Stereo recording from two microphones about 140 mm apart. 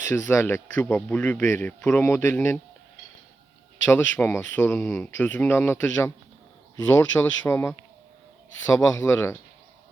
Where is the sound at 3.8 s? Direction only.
15° left (ahead or behind).